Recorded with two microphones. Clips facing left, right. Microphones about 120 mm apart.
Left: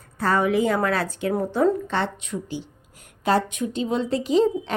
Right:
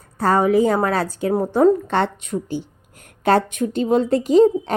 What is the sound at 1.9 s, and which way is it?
A woman's voice, 50° right (ahead or behind).